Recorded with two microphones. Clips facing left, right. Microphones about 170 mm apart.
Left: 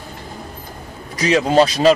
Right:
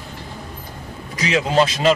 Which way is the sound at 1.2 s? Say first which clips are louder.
Left 4 dB; 40° left (ahead or behind).